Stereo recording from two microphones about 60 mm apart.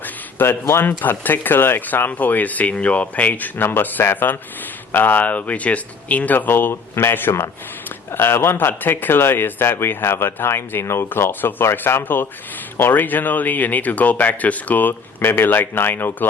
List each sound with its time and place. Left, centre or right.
0.7 s speech: left
3.6 s speech: left